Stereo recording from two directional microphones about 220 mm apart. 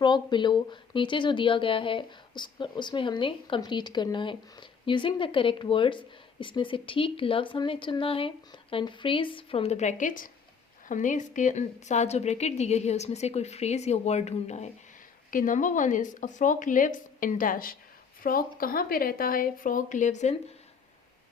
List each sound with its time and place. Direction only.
0.0 s speech: 20° left (ahead or behind)